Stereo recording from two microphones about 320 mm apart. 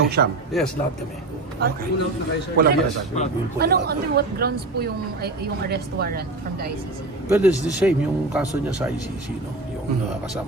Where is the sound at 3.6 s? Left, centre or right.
Right.